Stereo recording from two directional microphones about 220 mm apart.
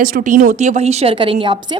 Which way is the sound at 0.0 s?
40° right (ahead or behind).